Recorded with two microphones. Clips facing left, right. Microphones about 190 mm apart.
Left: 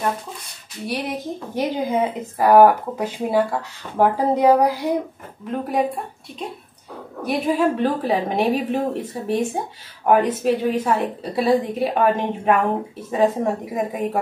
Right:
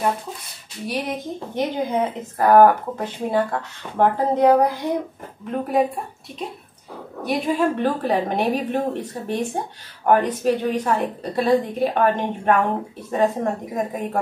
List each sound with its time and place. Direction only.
1.5 s a woman's voice: 5° left (ahead or behind)
7.2 s a woman's voice: centre (ahead or behind)